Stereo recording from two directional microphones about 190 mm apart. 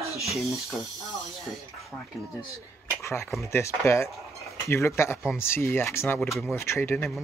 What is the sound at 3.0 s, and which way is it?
Speech, 15° left (ahead or behind).